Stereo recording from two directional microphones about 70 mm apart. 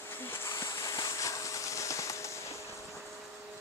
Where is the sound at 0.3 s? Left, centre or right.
Left.